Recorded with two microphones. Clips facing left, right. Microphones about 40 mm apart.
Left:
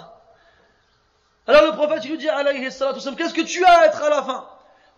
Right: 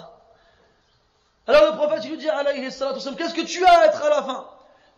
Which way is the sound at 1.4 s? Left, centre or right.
Left.